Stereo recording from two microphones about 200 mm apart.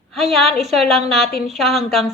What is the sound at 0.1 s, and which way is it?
A woman's voice, centre (ahead or behind).